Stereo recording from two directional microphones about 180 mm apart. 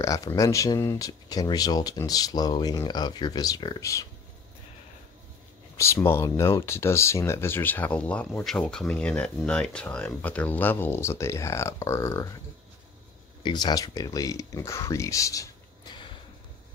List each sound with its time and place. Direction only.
0.0 s speech: 15° left (ahead or behind)
5.8 s speech: 15° left (ahead or behind)
13.4 s speech: 25° left (ahead or behind)